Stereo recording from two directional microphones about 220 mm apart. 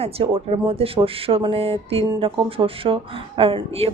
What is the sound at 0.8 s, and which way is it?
Speech, 25° right (ahead or behind).